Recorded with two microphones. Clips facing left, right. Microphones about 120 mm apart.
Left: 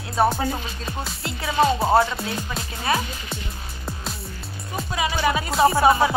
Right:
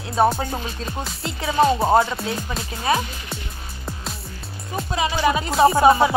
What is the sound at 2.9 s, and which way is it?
Speech, 25° right (ahead or behind).